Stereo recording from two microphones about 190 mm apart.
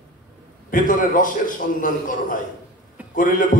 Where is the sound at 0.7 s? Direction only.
45° left (ahead or behind).